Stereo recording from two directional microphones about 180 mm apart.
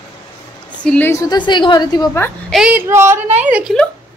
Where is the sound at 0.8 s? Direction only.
10° left (ahead or behind).